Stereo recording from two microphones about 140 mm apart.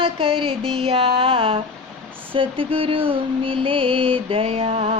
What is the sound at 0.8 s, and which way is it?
Speech, 45° right (ahead or behind).